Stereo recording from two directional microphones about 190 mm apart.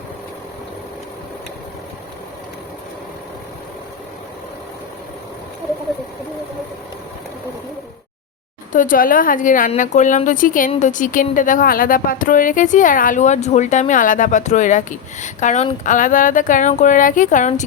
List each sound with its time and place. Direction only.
8.7 s speech: 45° left (ahead or behind)